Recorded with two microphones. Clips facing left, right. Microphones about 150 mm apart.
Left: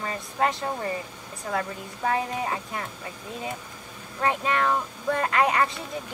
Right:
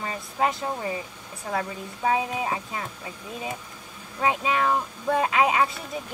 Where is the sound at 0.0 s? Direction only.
5° right (ahead or behind).